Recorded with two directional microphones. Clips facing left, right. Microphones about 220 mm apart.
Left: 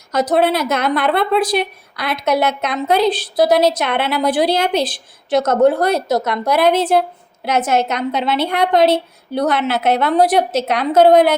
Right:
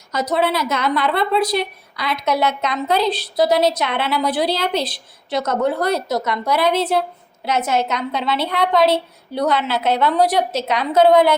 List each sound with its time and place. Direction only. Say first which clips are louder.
0.1 s a woman's voice: left 4 dB; 50° left (ahead or behind)